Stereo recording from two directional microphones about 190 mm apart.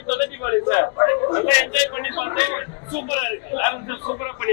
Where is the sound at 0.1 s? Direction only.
20° left (ahead or behind).